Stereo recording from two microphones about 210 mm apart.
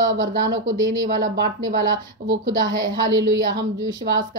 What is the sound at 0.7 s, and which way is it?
Speech, 15° right (ahead or behind).